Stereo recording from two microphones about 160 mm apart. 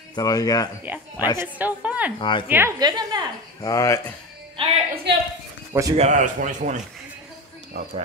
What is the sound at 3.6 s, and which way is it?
Speech, 20° left (ahead or behind).